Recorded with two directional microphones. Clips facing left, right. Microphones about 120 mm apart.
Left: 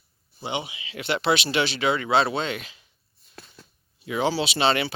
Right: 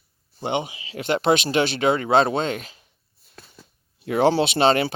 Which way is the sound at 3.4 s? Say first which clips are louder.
Even; 5° right (ahead or behind).